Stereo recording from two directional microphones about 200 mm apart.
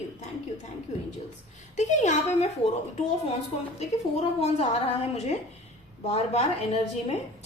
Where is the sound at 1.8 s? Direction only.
35° left (ahead or behind).